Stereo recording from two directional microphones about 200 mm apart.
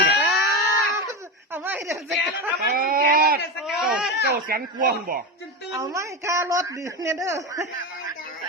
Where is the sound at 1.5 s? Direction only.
10° right (ahead or behind).